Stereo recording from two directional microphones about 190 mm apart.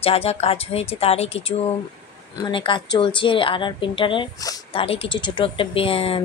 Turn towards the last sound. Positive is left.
turn(degrees=30)  # may be behind; listen again after turning